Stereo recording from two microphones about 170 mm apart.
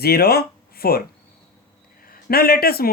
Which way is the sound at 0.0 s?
65° left (ahead or behind).